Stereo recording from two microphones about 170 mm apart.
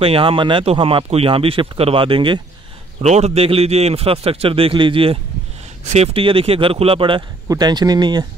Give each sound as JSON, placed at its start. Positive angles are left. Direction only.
{"t": 0.0, "sound": "speech", "side_deg": -30}